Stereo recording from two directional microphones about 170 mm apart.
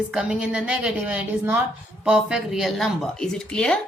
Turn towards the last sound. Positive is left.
turn(degrees=5)  # may be behind; listen again after turning